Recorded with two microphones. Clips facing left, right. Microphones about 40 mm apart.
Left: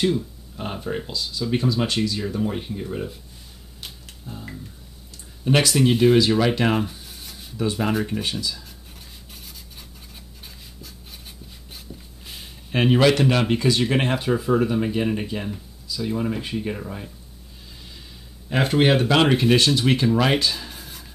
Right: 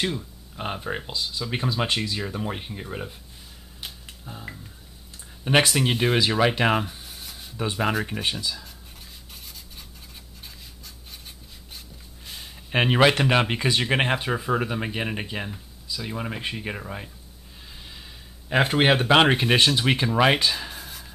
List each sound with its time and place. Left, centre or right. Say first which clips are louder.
0.0 s speech: left 6 dB; centre
3.8 s finger snapping: even; centre
5.4 s speech: even; right
5.8 s speech: left 6 dB; centre
6.7 s rub: left 1 dB; centre
7.5 s speech: left 4 dB; right
7.8 s speech: right 1 dB; centre
12.7 s speech: left 2 dB; right
18.5 s speech: left 1 dB; centre
20.7 s whispering: right 1 dB; centre